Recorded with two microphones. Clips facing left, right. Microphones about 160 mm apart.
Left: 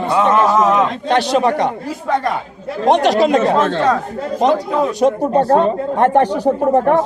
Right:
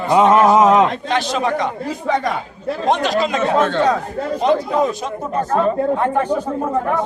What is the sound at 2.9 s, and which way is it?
Speech, 70° left (ahead or behind).